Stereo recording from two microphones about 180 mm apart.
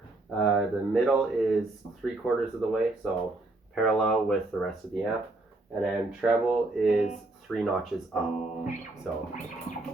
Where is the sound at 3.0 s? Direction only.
Centre (ahead or behind).